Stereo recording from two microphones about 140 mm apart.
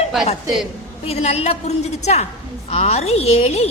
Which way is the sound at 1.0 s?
50° left (ahead or behind).